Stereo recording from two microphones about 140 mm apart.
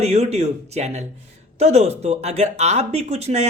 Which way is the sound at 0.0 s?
50° right (ahead or behind).